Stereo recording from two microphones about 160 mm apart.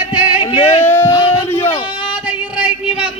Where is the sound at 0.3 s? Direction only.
25° left (ahead or behind).